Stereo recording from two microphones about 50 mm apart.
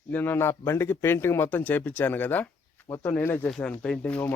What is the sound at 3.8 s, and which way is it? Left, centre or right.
Speech, left.